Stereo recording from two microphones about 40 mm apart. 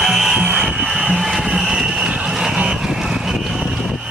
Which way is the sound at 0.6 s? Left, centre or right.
Centre.